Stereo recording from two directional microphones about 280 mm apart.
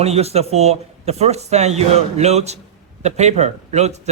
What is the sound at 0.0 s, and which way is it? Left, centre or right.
Speech, right.